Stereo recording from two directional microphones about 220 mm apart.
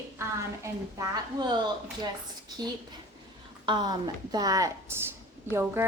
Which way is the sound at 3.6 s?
20° right (ahead or behind).